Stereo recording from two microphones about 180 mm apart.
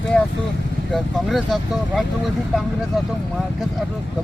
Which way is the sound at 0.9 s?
Centre (ahead or behind).